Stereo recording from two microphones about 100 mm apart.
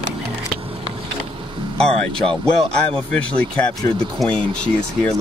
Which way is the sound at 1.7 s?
10° left (ahead or behind).